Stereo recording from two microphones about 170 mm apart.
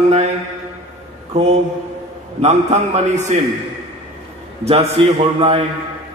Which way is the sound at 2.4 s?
40° right (ahead or behind).